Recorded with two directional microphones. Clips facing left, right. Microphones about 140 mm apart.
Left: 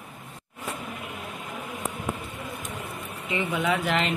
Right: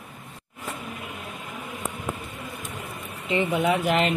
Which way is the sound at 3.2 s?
25° right (ahead or behind).